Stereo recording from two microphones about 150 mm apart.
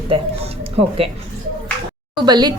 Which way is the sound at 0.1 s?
40° right (ahead or behind).